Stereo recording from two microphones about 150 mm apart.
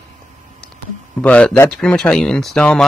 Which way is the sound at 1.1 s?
10° left (ahead or behind).